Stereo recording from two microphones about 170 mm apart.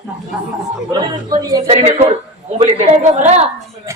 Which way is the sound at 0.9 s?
25° right (ahead or behind).